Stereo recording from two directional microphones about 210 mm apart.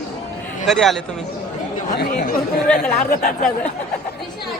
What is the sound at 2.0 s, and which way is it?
Speech, 40° left (ahead or behind).